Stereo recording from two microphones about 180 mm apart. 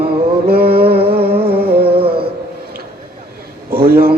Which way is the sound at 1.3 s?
30° right (ahead or behind).